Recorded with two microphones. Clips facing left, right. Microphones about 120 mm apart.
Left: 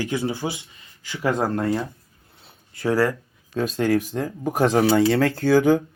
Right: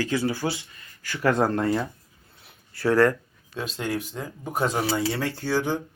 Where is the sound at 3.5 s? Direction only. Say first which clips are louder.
Left 8 dB; 45° left (ahead or behind).